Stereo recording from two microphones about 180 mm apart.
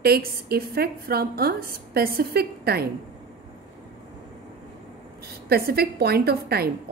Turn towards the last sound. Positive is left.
turn(degrees=-60)  # may be behind; listen again after turning